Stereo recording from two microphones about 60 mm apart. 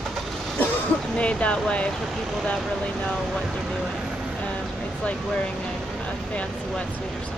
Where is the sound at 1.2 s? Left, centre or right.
Centre.